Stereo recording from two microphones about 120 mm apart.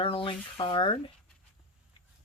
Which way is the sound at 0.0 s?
50° left (ahead or behind).